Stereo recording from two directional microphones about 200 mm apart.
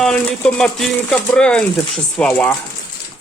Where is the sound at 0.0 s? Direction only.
5° left (ahead or behind).